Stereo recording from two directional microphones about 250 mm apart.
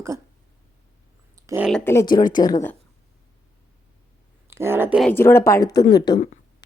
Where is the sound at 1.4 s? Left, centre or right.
Centre.